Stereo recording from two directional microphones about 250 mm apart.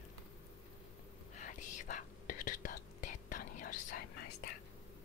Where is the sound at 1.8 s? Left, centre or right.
Left.